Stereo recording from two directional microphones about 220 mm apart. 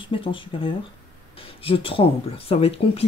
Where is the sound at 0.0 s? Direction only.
25° left (ahead or behind).